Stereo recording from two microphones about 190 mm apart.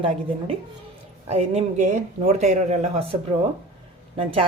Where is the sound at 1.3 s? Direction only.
35° right (ahead or behind).